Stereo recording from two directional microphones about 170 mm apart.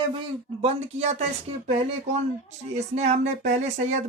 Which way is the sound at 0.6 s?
35° right (ahead or behind).